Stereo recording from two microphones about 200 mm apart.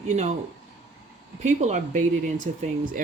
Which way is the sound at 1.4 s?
35° right (ahead or behind).